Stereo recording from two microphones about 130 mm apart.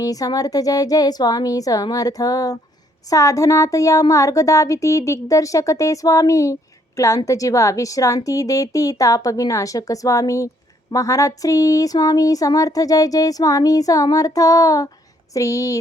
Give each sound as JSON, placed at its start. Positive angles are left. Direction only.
{"t": 0.0, "sound": "speech", "side_deg": 30}